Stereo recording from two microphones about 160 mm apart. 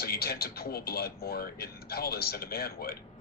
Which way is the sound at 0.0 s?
75° left (ahead or behind).